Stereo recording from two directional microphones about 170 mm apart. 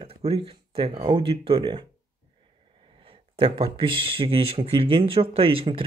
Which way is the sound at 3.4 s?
30° right (ahead or behind).